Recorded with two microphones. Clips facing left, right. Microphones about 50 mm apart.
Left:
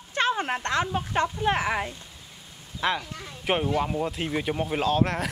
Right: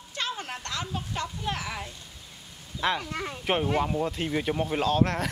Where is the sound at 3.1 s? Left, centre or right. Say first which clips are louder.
Right 7 dB; right.